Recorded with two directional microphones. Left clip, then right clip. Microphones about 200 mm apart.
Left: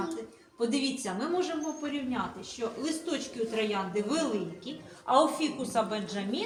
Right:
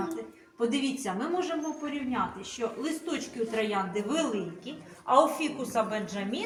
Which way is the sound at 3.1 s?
10° right (ahead or behind).